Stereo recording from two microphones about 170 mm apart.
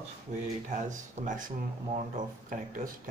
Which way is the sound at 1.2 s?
40° right (ahead or behind).